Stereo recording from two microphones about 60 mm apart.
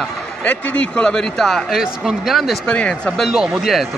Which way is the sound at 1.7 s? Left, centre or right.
Centre.